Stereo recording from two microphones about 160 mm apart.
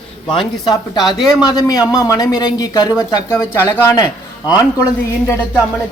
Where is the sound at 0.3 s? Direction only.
30° left (ahead or behind).